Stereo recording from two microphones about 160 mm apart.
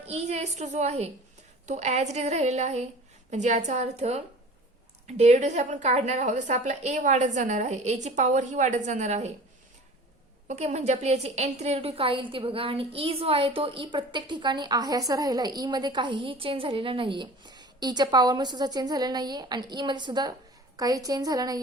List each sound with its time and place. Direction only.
0.0 s a woman's voice: 40° right (ahead or behind)
10.5 s a woman's voice: 45° right (ahead or behind); by 21.6 s 25° right (ahead or behind)